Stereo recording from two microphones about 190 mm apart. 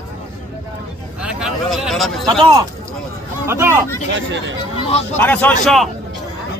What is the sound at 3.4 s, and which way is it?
Speech, 15° right (ahead or behind).